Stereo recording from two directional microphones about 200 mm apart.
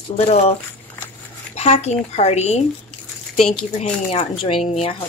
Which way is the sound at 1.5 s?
30° left (ahead or behind).